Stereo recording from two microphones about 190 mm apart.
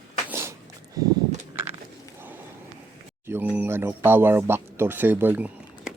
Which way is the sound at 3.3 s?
10° right (ahead or behind).